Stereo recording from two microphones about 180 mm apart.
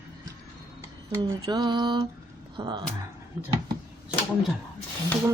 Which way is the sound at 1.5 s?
25° right (ahead or behind).